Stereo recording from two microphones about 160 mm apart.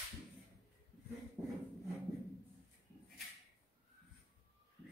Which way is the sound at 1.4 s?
5° right (ahead or behind).